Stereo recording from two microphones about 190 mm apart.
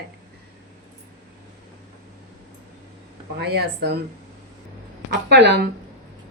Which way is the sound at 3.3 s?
60° right (ahead or behind).